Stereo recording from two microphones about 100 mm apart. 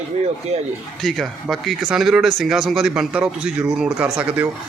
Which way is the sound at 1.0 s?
Centre (ahead or behind).